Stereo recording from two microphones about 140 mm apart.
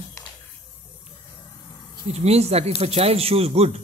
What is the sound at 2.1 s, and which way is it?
Speech, 50° right (ahead or behind).